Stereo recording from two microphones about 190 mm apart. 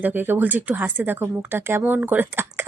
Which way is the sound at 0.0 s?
10° right (ahead or behind).